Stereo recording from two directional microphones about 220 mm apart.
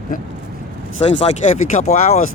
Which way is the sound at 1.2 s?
30° left (ahead or behind).